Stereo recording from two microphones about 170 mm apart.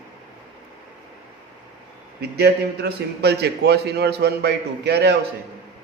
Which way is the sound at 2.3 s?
75° right (ahead or behind).